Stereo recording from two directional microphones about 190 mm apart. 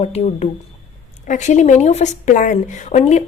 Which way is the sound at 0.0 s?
35° left (ahead or behind).